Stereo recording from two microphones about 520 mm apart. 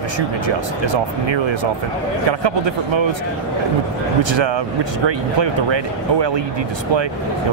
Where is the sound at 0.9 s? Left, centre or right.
Right.